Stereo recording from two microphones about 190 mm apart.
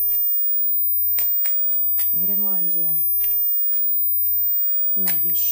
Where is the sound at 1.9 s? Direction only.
20° right (ahead or behind).